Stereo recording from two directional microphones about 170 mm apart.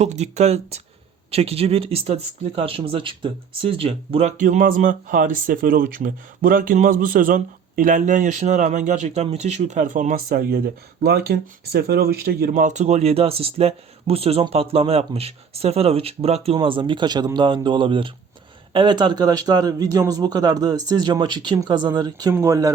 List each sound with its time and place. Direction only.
0.0 s speech: 40° right (ahead or behind); by 12.6 s 65° right (ahead or behind)
12.6 s speech: 40° right (ahead or behind); by 22.7 s 20° right (ahead or behind)